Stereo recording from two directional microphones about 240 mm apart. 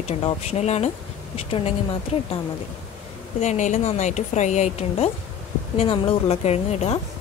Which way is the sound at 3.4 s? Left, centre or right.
Left.